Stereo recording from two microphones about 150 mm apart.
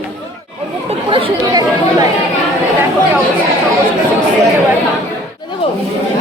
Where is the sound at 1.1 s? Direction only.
25° right (ahead or behind).